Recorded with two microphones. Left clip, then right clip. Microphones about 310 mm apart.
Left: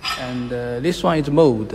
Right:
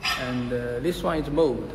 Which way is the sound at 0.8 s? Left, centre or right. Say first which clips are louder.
Left 10 dB; left.